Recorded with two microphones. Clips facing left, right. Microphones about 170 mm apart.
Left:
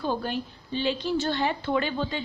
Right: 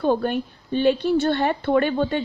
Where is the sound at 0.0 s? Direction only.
55° right (ahead or behind).